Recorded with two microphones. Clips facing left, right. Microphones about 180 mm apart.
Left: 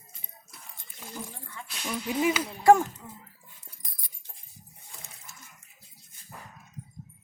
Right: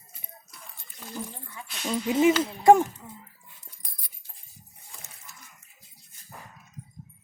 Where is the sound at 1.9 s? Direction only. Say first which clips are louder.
Right 6 dB; 25° right (ahead or behind).